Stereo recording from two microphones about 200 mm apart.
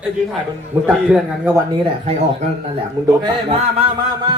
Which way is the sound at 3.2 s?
25° right (ahead or behind).